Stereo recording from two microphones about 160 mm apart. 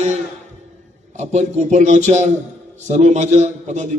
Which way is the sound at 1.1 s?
45° right (ahead or behind).